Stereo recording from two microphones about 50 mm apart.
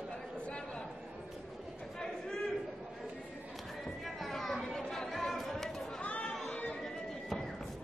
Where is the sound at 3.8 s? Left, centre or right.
Centre.